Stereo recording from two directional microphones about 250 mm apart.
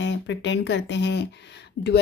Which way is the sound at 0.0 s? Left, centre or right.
Left.